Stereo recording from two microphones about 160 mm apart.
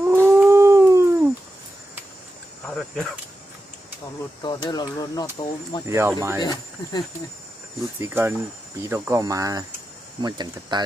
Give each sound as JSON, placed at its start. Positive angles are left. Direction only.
{"t": 0.0, "sound": "howl", "side_deg": -15}
{"t": 4.4, "sound": "speech", "side_deg": 25}
{"t": 5.9, "sound": "speech", "side_deg": -15}
{"t": 6.4, "sound": "speech", "side_deg": 25}
{"t": 8.0, "sound": "speech", "side_deg": -15}